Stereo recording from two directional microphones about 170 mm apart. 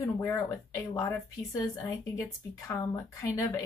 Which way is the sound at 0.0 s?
15° left (ahead or behind).